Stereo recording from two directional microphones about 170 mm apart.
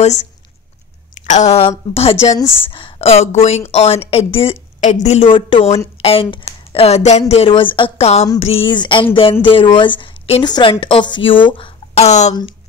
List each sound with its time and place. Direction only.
1.2 s a woman's voice: 45° left (ahead or behind)